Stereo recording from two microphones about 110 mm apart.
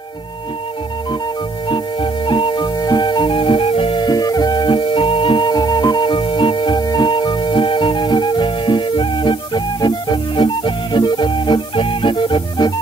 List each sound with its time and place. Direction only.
1.7 s music: 50° left (ahead or behind)